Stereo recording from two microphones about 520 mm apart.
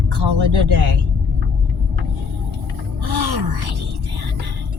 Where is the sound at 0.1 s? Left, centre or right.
Right.